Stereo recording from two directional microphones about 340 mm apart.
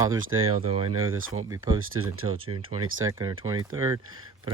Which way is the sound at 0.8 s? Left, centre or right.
Right.